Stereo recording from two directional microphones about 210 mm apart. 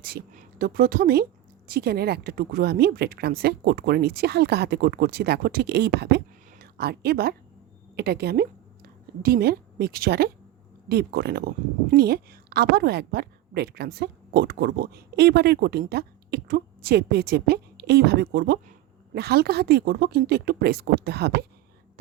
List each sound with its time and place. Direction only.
0.0 s a woman's voice: 45° right (ahead or behind)